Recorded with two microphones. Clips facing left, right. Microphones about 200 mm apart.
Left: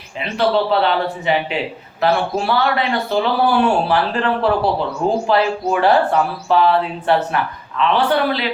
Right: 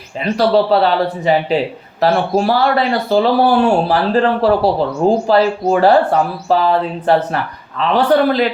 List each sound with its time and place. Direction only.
0.2 s speech: 40° right (ahead or behind)